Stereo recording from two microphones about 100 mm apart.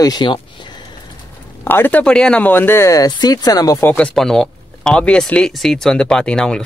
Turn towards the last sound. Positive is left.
turn(degrees=10)  # may be behind; listen again after turning